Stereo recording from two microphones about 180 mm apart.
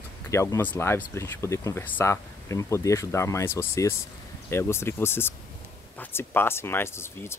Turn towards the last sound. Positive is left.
turn(degrees=15)  # may be behind; listen again after turning